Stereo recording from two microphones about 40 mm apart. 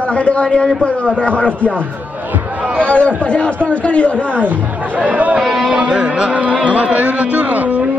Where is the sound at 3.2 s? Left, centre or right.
Left.